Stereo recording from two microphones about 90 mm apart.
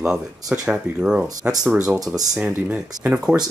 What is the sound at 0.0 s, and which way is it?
Speech, 5° right (ahead or behind).